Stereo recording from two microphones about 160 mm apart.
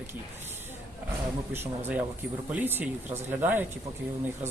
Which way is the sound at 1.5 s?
15° right (ahead or behind).